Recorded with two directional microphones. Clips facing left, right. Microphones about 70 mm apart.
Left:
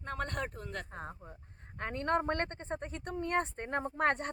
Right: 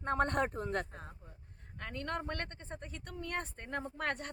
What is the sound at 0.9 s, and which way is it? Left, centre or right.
Speech, left.